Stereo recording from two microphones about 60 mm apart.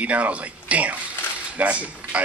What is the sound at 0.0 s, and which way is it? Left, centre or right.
Speech, right.